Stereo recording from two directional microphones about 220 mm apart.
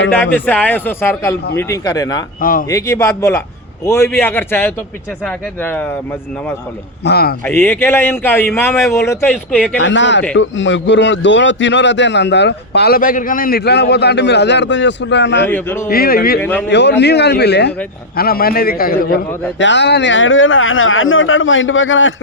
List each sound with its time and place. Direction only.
0.1 s speech: 5° left (ahead or behind)
2.4 s speech: 40° left (ahead or behind)
2.6 s speech: 15° left (ahead or behind)
7.0 s a man's voice: 45° left (ahead or behind)
7.4 s speech: 10° left (ahead or behind)
9.8 s a man's voice: 55° left (ahead or behind)
15.4 s speech: 10° left (ahead or behind)
15.9 s a man's voice: 40° left (ahead or behind)
16.4 s speech: 10° left (ahead or behind)
16.6 s a man's voice: 50° left (ahead or behind)
19.5 s a man's voice: 55° left (ahead or behind)